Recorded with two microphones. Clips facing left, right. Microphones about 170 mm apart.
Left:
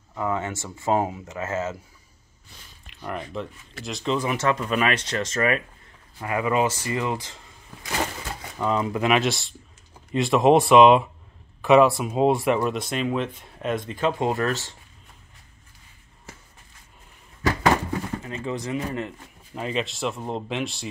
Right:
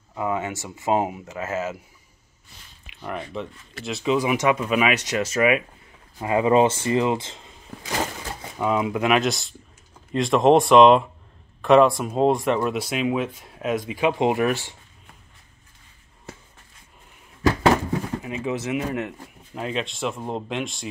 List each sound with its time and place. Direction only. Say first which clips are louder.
0.1 s speech: right 1 dB; 15° right (ahead or behind)
2.9 s speech: right 1 dB; 5° right (ahead or behind)
6.1 s speech: right 5 dB; 25° right (ahead or behind)
8.5 s speech: right 2 dB; 5° right (ahead or behind)
18.2 s speech: right 3 dB; 10° right (ahead or behind)